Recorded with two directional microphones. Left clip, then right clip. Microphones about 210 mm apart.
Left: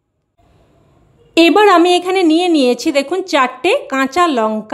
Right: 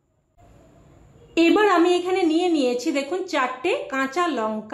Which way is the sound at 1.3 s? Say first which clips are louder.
Left 9 dB; 50° left (ahead or behind).